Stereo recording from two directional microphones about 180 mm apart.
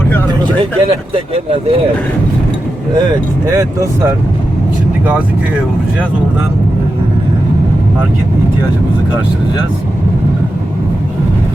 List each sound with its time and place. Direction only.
0.6 s speech: 30° right (ahead or behind)
3.5 s speech: 15° right (ahead or behind)